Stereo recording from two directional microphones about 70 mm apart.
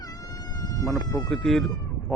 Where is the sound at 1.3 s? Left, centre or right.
Centre.